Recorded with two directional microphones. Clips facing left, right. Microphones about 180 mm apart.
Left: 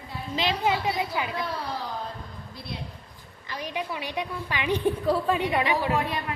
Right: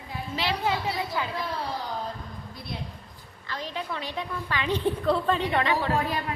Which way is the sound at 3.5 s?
15° left (ahead or behind).